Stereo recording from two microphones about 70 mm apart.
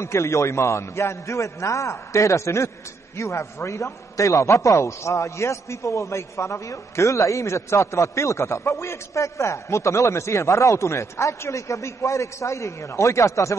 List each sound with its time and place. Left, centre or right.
0.0 s a man's voice: left